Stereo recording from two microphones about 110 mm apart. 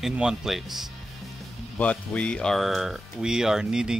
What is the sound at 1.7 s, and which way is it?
Speech, 10° left (ahead or behind).